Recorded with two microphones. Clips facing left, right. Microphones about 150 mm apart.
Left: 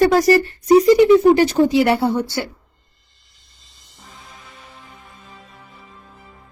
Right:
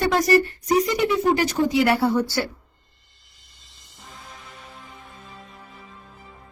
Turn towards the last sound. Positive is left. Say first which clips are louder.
# even
turn(degrees=0)  # may be behind; listen again after turning